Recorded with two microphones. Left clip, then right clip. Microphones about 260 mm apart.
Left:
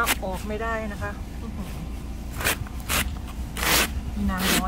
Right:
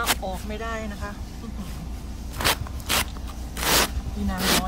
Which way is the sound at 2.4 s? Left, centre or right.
Right.